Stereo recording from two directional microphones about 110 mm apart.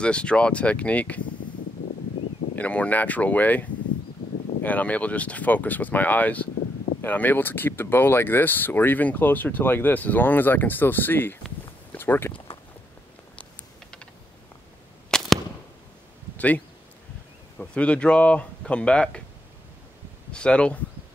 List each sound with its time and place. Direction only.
0.0 s speech: 10° left (ahead or behind)
2.5 s speech: 15° left (ahead or behind)
13.4 s typing: 10° left (ahead or behind)
15.0 s arrow: 5° left (ahead or behind)
16.3 s speech: 15° left (ahead or behind)
20.2 s speech: 10° left (ahead or behind)